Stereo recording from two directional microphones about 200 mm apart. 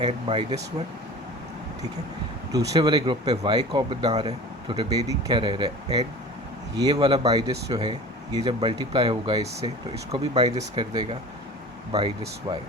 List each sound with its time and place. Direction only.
0.0 s speech: 25° right (ahead or behind)
2.5 s speech: 20° right (ahead or behind)
10.4 s speech: 20° right (ahead or behind)